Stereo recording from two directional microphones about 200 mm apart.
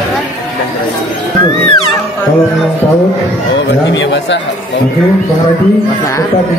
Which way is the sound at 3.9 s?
60° left (ahead or behind).